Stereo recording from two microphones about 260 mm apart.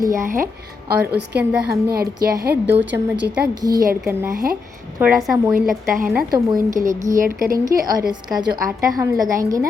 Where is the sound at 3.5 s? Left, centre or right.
Centre.